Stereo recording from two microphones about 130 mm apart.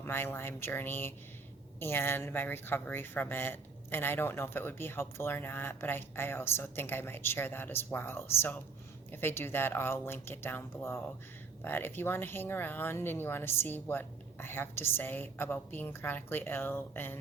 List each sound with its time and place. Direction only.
0.0 s speech: 15° left (ahead or behind)